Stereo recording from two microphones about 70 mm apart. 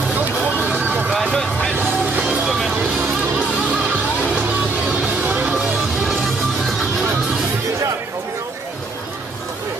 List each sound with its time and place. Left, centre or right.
0.1 s a sound: right
1.3 s music: centre
1.8 s music: right
2.4 s music: centre
3.0 s music: centre